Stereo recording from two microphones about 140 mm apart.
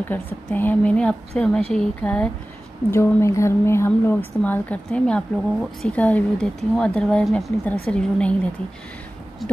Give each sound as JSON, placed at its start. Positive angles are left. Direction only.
{"t": 0.1, "sound": "a woman's voice", "side_deg": 10}